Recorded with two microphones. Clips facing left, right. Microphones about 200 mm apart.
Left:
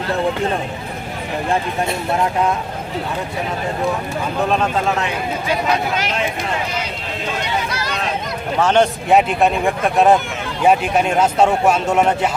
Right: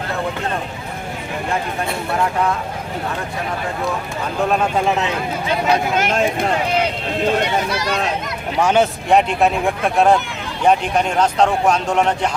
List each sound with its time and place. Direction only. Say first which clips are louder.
4.4 s speech: right 2 dB; 5° right (ahead or behind)
6.0 s speech: right 4 dB; 50° right (ahead or behind)
6.7 s run: right 7 dB; 55° right (ahead or behind)
8.6 s speech: left 1 dB; 10° right (ahead or behind)